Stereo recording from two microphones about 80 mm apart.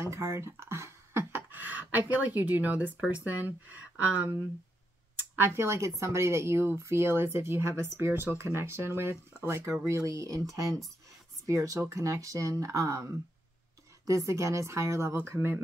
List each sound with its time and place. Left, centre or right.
0.0 s speech: right
5.3 s speech: right
15.3 s speech: right